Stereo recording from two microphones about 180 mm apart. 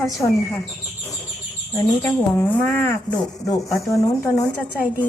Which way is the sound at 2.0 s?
10° left (ahead or behind).